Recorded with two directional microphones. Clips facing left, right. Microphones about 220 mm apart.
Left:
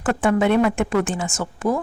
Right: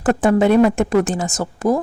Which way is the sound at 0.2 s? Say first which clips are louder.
Right 4 dB; 40° right (ahead or behind).